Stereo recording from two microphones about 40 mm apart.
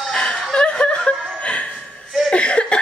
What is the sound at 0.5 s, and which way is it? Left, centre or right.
Snicker, left.